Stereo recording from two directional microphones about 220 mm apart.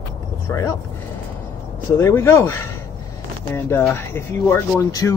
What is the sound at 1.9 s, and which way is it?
Speech, 10° left (ahead or behind).